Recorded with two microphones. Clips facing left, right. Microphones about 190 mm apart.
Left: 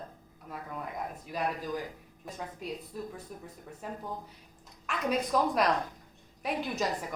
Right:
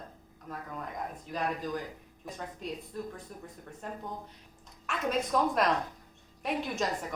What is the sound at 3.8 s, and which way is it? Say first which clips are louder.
A woman's voice: left 1 dB; 5° left (ahead or behind).